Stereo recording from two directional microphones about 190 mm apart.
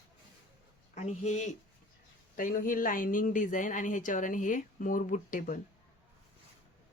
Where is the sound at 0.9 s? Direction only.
35° left (ahead or behind).